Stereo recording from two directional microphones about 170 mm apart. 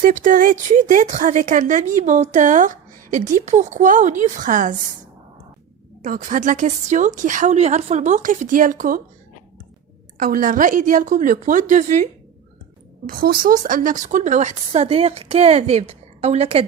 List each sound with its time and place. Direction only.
0.0 s speech: 50° right (ahead or behind)
6.0 s speech: 50° right (ahead or behind)
10.2 s speech: 55° right (ahead or behind)
13.1 s speech: 55° right (ahead or behind); by 16.6 s 40° right (ahead or behind)